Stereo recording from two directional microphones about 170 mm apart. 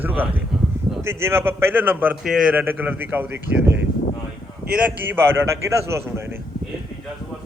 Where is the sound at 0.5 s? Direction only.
Centre (ahead or behind).